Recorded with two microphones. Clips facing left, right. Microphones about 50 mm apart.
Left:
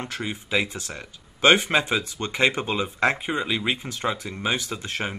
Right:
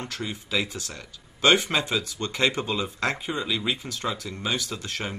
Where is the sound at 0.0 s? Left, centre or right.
Left.